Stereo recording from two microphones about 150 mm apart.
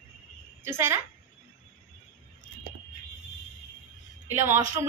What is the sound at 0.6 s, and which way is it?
Speech, 15° right (ahead or behind).